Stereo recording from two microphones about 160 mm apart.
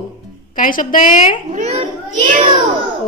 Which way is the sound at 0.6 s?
60° left (ahead or behind).